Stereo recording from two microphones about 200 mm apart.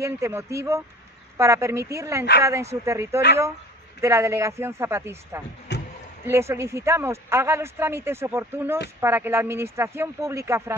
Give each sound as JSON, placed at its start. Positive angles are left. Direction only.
{"t": 0.0, "sound": "speech", "side_deg": -15}
{"t": 5.7, "sound": "a sound", "side_deg": 60}
{"t": 6.2, "sound": "speech", "side_deg": -15}